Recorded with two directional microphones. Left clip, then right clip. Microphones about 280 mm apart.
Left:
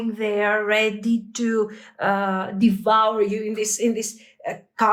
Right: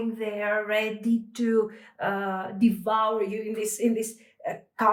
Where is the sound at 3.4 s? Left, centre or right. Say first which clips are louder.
Left 5 dB; centre.